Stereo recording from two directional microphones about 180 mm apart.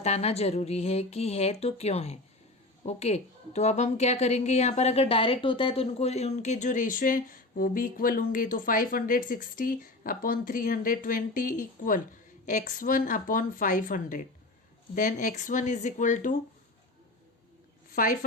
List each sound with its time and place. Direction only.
0.0 s speech: 35° left (ahead or behind)
17.9 s speech: 50° left (ahead or behind)